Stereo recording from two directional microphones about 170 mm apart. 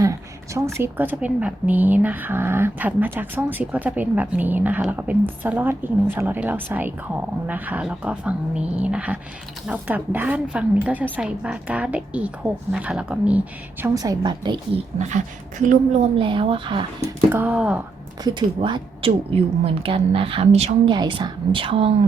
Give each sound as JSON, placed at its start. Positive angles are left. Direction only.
{"t": 0.0, "sound": "a woman's voice", "side_deg": -20}
{"t": 13.9, "sound": "a woman's voice", "side_deg": -20}
{"t": 14.9, "sound": "speech", "side_deg": -45}
{"t": 16.1, "sound": "a woman's voice", "side_deg": -30}
{"t": 17.3, "sound": "a woman's voice", "side_deg": -10}
{"t": 18.2, "sound": "a woman's voice", "side_deg": -25}
{"t": 20.9, "sound": "a woman's voice", "side_deg": -30}